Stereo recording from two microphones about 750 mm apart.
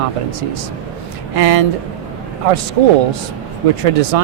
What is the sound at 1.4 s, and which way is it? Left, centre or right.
Speech, right.